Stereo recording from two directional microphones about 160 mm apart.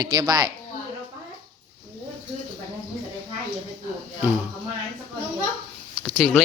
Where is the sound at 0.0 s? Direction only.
25° right (ahead or behind).